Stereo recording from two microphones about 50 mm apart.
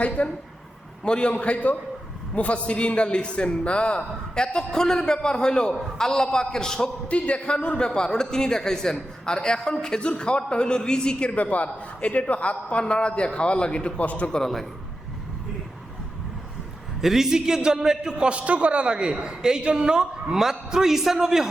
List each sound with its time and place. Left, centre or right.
0.2 s a man's voice: left
7.1 s speech: left
11.3 s a man's voice: left
14.0 s a man's voice: left
14.3 s speech: centre
17.0 s a man's voice: centre